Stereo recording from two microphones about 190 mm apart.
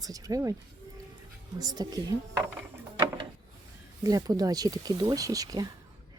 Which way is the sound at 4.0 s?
20° right (ahead or behind).